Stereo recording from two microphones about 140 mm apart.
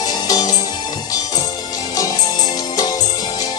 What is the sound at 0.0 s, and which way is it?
Music, 30° left (ahead or behind).